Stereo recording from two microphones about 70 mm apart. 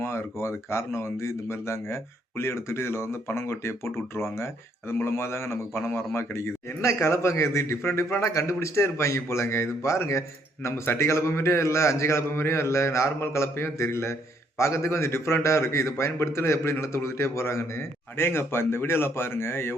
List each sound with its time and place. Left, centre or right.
0.0 s a man's voice: left